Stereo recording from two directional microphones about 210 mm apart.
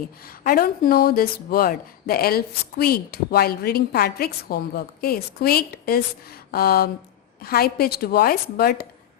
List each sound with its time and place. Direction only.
0.4 s speech: 45° left (ahead or behind)